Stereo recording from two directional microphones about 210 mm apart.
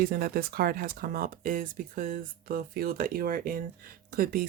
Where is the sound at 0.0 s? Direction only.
45° right (ahead or behind).